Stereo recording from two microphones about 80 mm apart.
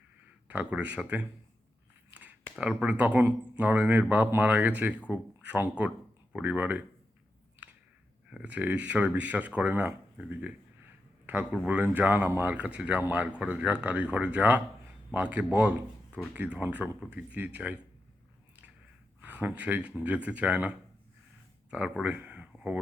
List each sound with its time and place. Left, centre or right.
0.4 s speech: right
2.6 s speech: centre
8.3 s speech: centre
11.5 s speech: centre
19.2 s speech: centre
22.1 s a sound: right